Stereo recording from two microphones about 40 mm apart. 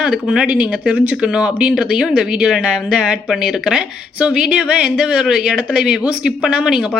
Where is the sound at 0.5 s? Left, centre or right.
Right.